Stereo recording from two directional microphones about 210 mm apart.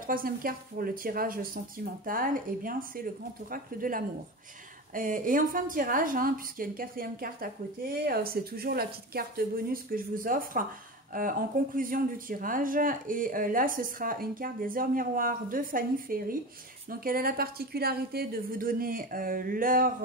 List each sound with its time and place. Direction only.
0.0 s a woman's voice: 40° right (ahead or behind)